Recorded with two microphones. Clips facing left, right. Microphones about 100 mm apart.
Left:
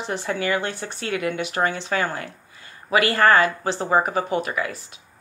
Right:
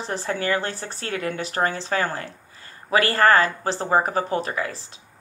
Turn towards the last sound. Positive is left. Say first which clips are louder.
# left 1 dB
turn(degrees=-35)  # may be behind; listen again after turning